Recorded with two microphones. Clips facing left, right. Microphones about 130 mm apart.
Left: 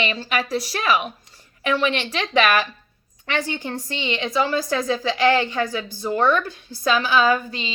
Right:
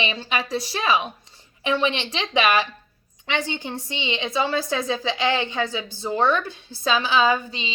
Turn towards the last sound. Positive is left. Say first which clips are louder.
# left 1 dB
turn(degrees=-20)  # may be behind; listen again after turning